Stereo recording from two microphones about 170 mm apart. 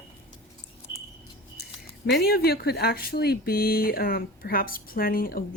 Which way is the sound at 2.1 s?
65° left (ahead or behind).